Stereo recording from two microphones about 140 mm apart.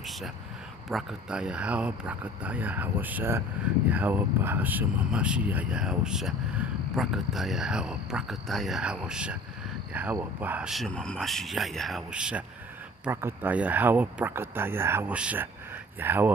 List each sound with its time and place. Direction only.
0.8 s speech: 5° right (ahead or behind)
10.7 s speech: 5° left (ahead or behind); by 16.3 s 15° right (ahead or behind)